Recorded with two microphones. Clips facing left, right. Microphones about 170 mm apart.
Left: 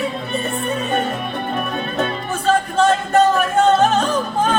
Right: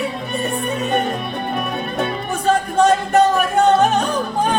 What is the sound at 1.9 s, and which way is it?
Music, 15° right (ahead or behind).